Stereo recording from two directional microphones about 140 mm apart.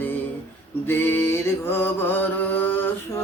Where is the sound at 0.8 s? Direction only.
15° left (ahead or behind).